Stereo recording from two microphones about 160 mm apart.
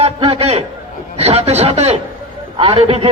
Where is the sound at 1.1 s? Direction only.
40° right (ahead or behind).